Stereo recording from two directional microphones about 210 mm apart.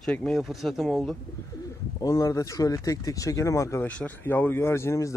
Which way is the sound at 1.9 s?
15° left (ahead or behind).